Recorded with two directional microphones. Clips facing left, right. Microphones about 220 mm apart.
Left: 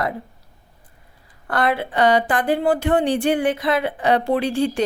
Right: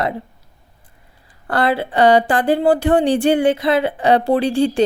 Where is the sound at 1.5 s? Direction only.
30° right (ahead or behind).